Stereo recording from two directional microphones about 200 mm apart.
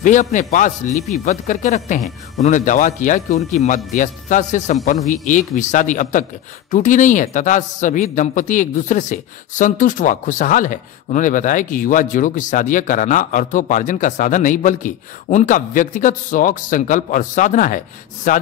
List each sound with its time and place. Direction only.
0.0 s a woman's voice: 40° left (ahead or behind)